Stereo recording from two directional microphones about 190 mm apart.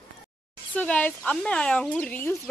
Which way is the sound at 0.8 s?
10° left (ahead or behind).